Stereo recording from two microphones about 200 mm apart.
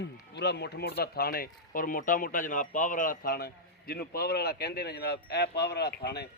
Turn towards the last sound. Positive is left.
turn(degrees=55)  # may be behind; listen again after turning